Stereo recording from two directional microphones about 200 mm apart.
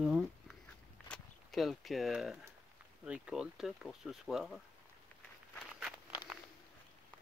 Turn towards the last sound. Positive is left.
turn(degrees=-5)  # may be behind; listen again after turning